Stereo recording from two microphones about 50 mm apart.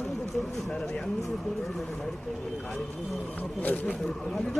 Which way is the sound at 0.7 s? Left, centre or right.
Centre.